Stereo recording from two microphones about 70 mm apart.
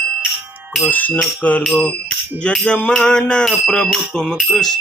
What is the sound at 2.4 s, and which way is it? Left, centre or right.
Music, centre.